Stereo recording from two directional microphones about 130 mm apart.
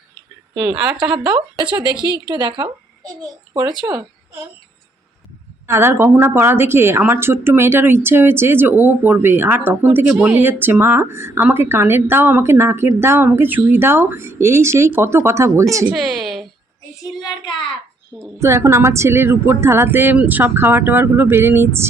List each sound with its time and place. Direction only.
0.5 s a woman's voice: 10° right (ahead or behind)
0.9 s speech: 35° right (ahead or behind)
1.9 s a woman's voice: 30° left (ahead or behind)
2.3 s a woman's voice: 35° right (ahead or behind)
5.6 s a woman's voice: 20° right (ahead or behind)
16.2 s a sound: centre (ahead or behind)
17.2 s child singing: 35° left (ahead or behind)
18.3 s a woman's voice: 20° right (ahead or behind)